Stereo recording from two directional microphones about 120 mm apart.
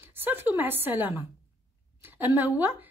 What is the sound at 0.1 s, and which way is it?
A woman's voice, 15° right (ahead or behind).